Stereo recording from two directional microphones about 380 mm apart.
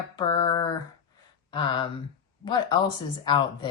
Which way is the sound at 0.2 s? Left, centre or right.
Centre.